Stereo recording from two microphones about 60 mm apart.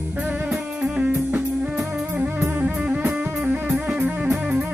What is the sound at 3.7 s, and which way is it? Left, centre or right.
Music, centre.